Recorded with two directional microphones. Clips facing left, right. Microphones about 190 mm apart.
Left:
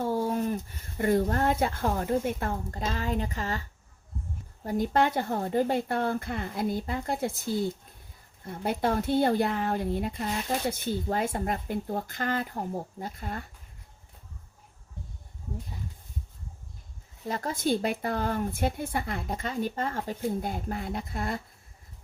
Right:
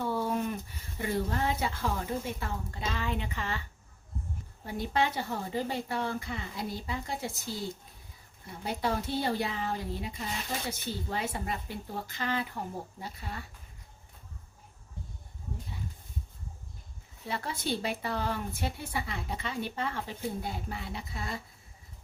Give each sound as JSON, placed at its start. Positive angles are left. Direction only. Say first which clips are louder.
{"t": 0.0, "sound": "a sound", "louder": "left 3 dB", "side_deg": 40}
{"t": 0.9, "sound": "speech", "louder": "left 7 dB", "side_deg": 50}
{"t": 4.6, "sound": "speech", "louder": "left 5 dB", "side_deg": 45}
{"t": 8.4, "sound": "speech", "louder": "left 5 dB", "side_deg": 55}
{"t": 17.2, "sound": "speech", "louder": "left 6 dB", "side_deg": 45}